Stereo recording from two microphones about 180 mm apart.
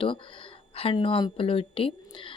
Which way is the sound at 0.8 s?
30° left (ahead or behind).